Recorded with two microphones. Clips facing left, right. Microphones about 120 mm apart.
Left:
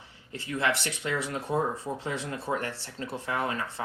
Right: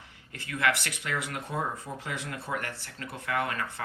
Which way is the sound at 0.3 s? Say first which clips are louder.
Even; 25° left (ahead or behind).